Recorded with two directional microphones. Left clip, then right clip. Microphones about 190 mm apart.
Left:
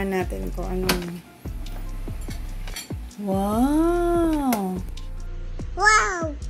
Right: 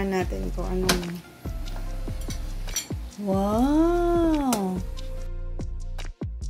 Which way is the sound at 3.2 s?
Centre (ahead or behind).